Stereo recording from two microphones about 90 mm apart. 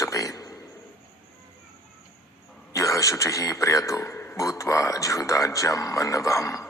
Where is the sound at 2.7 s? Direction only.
35° left (ahead or behind).